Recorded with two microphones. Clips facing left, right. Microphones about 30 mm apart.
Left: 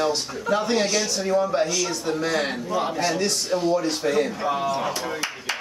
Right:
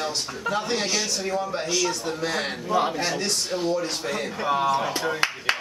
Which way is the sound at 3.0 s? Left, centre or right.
Centre.